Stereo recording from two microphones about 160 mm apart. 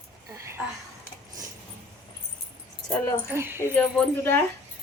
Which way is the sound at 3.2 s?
15° right (ahead or behind).